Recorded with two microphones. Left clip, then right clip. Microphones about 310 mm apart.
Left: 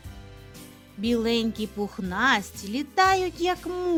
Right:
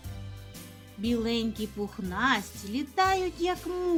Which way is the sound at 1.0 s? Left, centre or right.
Left.